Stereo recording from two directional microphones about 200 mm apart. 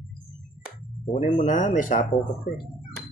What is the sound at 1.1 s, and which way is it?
Speech, 40° left (ahead or behind).